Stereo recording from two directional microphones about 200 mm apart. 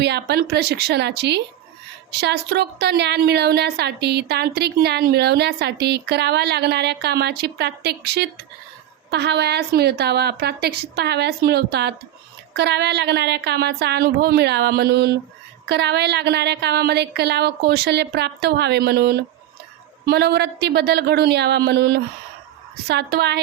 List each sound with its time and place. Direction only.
0.0 s a woman's voice: 55° right (ahead or behind)